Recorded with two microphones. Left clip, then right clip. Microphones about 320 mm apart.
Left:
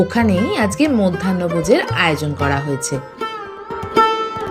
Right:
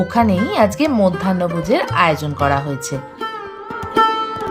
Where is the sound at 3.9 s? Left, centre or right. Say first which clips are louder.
Even; centre.